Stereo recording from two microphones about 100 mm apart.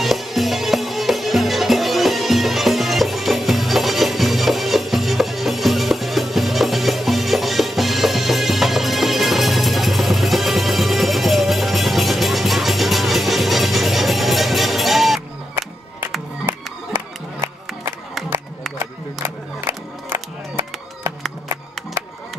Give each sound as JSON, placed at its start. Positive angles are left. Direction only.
{"t": 0.0, "sound": "music", "side_deg": 0}
{"t": 16.4, "sound": "music", "side_deg": -25}
{"t": 18.8, "sound": "music", "side_deg": -25}